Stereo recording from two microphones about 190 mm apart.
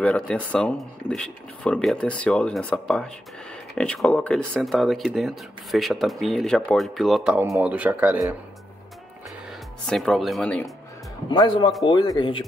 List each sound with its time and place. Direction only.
0.0 s speech: 5° left (ahead or behind)
9.8 s speech: centre (ahead or behind)
11.2 s speech: 25° left (ahead or behind)